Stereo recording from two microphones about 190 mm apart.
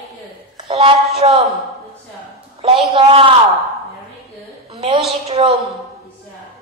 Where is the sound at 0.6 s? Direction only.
30° right (ahead or behind).